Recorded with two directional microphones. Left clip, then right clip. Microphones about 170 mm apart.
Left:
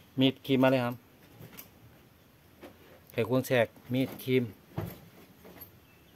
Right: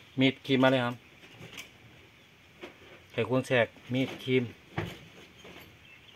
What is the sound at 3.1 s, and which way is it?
Speech, 20° left (ahead or behind).